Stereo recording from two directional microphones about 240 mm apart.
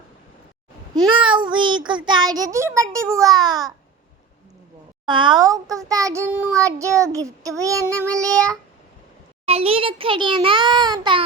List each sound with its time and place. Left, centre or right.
0.9 s child singing: right
5.0 s child singing: centre
9.5 s a child's voice: right